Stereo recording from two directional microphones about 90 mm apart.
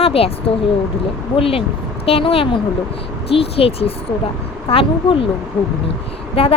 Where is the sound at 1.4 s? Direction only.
90° left.